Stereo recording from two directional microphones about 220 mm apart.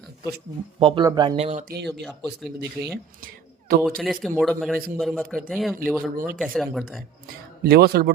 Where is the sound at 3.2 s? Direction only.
40° right (ahead or behind).